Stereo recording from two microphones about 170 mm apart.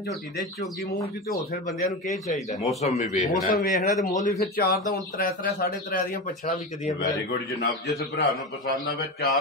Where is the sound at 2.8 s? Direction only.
40° left (ahead or behind).